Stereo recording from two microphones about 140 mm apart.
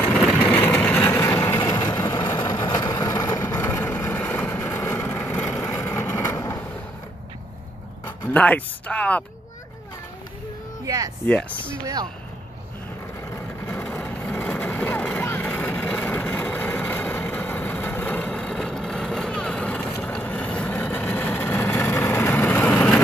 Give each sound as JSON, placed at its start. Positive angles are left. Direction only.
{"t": 0.3, "sound": "vehicle", "side_deg": 10}
{"t": 2.6, "sound": "vehicle", "side_deg": 30}
{"t": 5.6, "sound": "vehicle", "side_deg": 20}
{"t": 8.3, "sound": "speech", "side_deg": 10}
{"t": 11.2, "sound": "speech", "side_deg": 10}
{"t": 13.7, "sound": "vehicle", "side_deg": 10}